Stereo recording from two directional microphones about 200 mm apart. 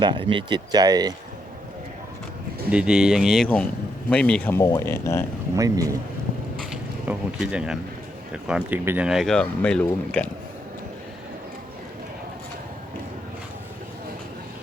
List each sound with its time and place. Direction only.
0.0 s speech: 25° right (ahead or behind)
2.6 s speech: 5° right (ahead or behind); by 5.2 s 15° left (ahead or behind)
5.5 s speech: 15° right (ahead or behind)
6.6 s mechanisms: 5° right (ahead or behind)
8.4 s speech: 5° right (ahead or behind)